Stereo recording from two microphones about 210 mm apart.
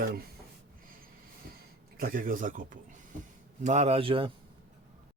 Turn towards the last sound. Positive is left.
turn(degrees=-25)  # may be behind; listen again after turning